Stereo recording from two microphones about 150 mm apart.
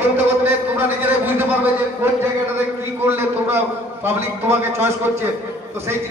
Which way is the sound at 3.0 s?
15° right (ahead or behind).